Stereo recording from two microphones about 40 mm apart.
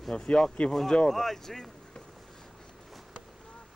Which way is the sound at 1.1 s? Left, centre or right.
Centre.